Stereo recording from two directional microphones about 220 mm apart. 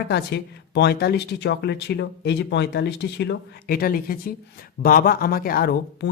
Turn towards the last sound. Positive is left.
turn(degrees=45)  # may be behind; listen again after turning